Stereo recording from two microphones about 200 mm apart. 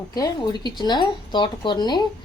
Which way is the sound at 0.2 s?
20° left (ahead or behind).